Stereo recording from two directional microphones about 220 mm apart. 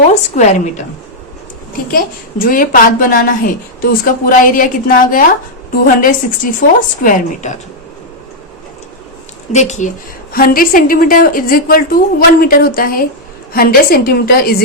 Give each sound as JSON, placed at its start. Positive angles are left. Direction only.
{"t": 0.1, "sound": "a woman's voice", "side_deg": 35}
{"t": 1.9, "sound": "a woman's voice", "side_deg": 40}
{"t": 9.5, "sound": "a woman's voice", "side_deg": 30}